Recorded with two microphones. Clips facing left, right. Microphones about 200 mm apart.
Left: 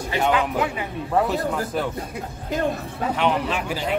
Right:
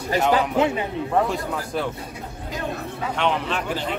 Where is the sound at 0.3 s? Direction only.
30° right (ahead or behind).